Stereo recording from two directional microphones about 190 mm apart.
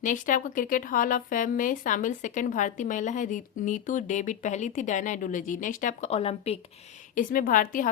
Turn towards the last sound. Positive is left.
turn(degrees=45)  # may be behind; listen again after turning